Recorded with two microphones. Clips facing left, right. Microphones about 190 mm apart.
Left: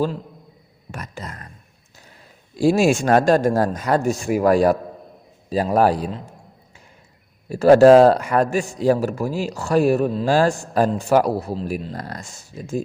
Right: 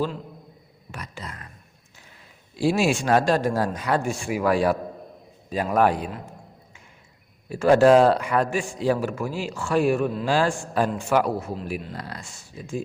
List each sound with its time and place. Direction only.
0.9 s speech: 45° left (ahead or behind)
2.6 s a man's voice: 45° left (ahead or behind)
7.5 s a man's voice: 40° left (ahead or behind)